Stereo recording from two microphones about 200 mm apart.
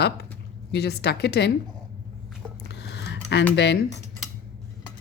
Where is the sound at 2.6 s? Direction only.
55° left (ahead or behind).